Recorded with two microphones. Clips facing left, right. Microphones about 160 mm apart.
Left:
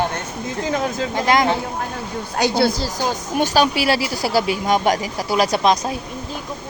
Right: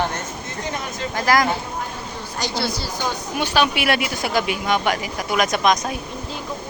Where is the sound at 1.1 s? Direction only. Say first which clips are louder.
Left 1 dB; 25° left (ahead or behind).